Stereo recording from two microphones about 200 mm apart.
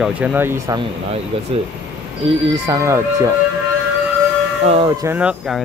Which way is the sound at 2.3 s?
25° right (ahead or behind).